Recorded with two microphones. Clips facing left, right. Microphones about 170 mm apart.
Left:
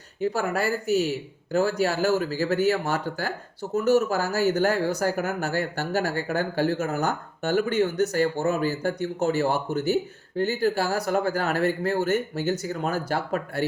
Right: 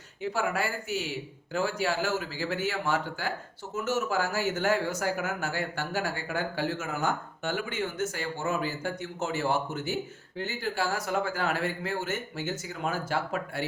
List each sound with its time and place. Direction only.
0.2 s speech: 40° left (ahead or behind)